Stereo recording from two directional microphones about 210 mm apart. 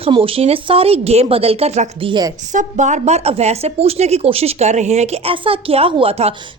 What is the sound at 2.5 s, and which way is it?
Speech, 35° right (ahead or behind).